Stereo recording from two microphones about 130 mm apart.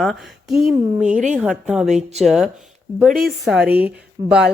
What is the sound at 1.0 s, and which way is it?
Speech, 70° right (ahead or behind).